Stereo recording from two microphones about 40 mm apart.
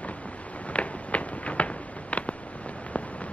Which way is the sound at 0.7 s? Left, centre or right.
Left.